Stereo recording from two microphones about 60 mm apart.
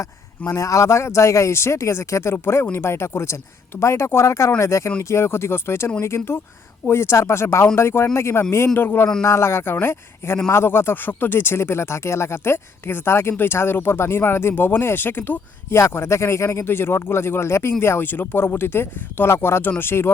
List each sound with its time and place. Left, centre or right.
0.0 s a man's voice: left
2.3 s speech: left
8.7 s speech: left
9.2 s speech: left
15.7 s speech: left